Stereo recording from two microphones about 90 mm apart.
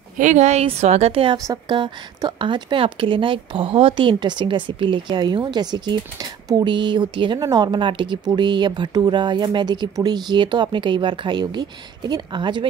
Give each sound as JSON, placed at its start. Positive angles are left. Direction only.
{"t": 0.7, "sound": "a woman's voice", "side_deg": -90}
{"t": 1.5, "sound": "speech", "side_deg": -55}
{"t": 7.3, "sound": "speech", "side_deg": -45}